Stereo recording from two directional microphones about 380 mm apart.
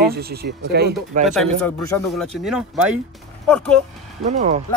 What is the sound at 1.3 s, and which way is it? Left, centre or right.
Speech, centre.